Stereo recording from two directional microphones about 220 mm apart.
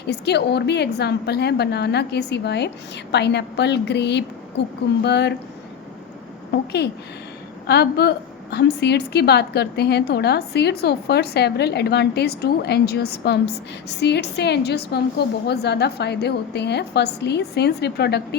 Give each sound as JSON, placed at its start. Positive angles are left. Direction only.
{"t": 0.1, "sound": "a woman's voice", "side_deg": 50}
{"t": 7.7, "sound": "a woman's voice", "side_deg": 50}